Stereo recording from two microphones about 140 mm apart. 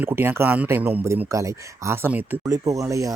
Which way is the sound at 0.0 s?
15° right (ahead or behind).